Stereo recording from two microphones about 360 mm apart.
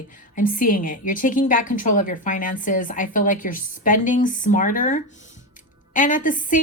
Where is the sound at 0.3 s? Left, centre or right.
Left.